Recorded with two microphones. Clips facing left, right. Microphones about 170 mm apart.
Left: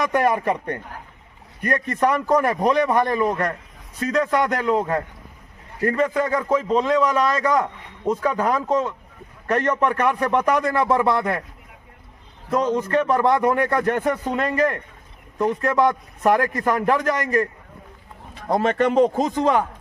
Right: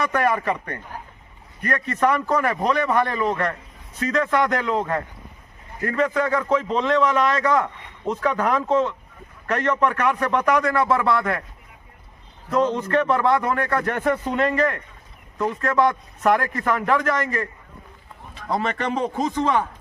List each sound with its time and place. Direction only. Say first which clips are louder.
0.0 s a man's voice: left 2 dB; 15° left (ahead or behind)
12.5 s a man's voice: even; 10° left (ahead or behind)
18.9 s speech: left 5 dB; 40° left (ahead or behind)